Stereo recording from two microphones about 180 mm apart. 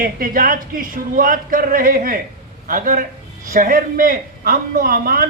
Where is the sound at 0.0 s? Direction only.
50° right (ahead or behind).